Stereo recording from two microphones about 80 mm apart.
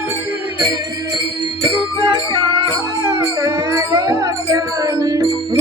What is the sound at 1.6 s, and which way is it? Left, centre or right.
Music, right.